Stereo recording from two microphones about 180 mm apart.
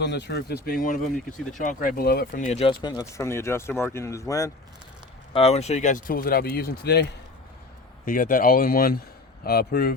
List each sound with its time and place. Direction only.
0.0 s speech: 70° left (ahead or behind); by 2.7 s 35° left (ahead or behind)
3.0 s speech: 15° left (ahead or behind)
5.3 s speech: 35° left (ahead or behind); by 7.1 s 65° left (ahead or behind)
8.0 s speech: 50° left (ahead or behind)